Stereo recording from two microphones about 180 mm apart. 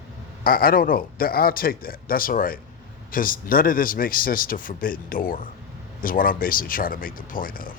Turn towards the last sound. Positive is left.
turn(degrees=50)  # may be behind; listen again after turning